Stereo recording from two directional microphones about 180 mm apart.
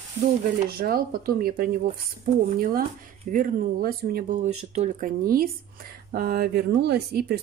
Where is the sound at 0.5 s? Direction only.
55° right (ahead or behind).